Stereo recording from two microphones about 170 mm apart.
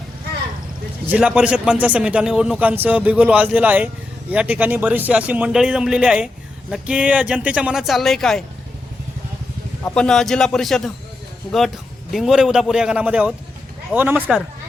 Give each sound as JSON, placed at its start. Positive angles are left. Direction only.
{"t": 1.0, "sound": "a man's voice", "side_deg": -5}
{"t": 9.8, "sound": "a man's voice", "side_deg": 5}
{"t": 12.1, "sound": "a man's voice", "side_deg": 0}